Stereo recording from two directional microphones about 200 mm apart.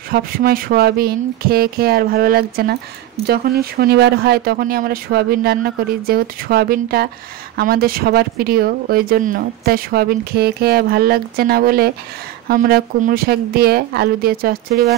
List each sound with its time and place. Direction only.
0.1 s speech: 50° right (ahead or behind)